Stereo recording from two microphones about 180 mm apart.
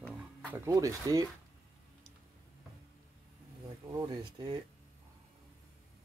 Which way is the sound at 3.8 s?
25° right (ahead or behind).